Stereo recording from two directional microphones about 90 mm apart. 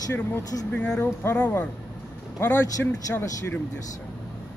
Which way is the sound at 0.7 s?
10° left (ahead or behind).